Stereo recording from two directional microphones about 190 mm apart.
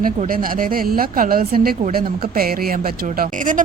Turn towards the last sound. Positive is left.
turn(degrees=-45)  # may be behind; listen again after turning